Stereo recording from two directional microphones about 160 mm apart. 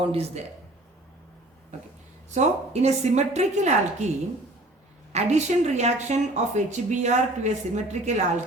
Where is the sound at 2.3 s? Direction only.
45° right (ahead or behind).